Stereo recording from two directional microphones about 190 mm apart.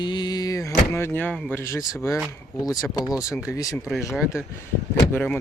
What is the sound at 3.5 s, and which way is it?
Speech, 15° left (ahead or behind).